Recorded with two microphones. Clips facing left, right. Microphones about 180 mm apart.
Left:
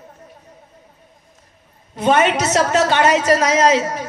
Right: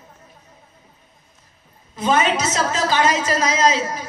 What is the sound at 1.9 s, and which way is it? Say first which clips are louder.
A woman's voice: left 3 dB; 65° left (ahead or behind).